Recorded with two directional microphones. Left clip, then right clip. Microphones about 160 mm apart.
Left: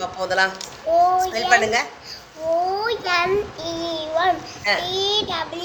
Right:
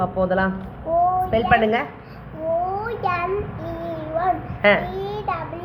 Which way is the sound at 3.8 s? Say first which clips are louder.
Left 2 dB; 35° left (ahead or behind).